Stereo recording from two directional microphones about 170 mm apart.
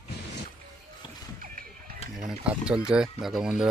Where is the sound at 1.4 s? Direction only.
55° right (ahead or behind).